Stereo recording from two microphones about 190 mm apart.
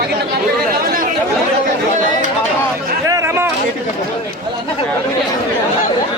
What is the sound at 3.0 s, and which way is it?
Chatter, 15° right (ahead or behind).